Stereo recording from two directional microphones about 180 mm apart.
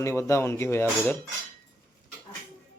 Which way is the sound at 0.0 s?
15° left (ahead or behind).